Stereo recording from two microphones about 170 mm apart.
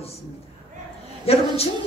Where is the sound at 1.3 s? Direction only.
35° left (ahead or behind).